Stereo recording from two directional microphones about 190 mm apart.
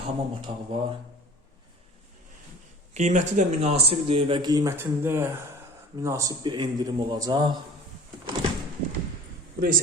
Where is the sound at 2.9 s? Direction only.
40° right (ahead or behind); by 7.6 s 20° right (ahead or behind).